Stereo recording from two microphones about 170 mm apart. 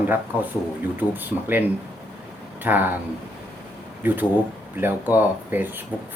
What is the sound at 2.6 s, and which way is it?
Speech, 10° right (ahead or behind).